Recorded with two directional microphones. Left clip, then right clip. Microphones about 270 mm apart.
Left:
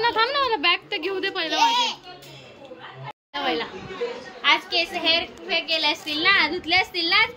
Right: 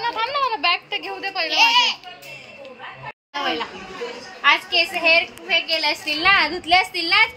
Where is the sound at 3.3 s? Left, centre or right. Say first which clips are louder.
Right 1 dB; centre.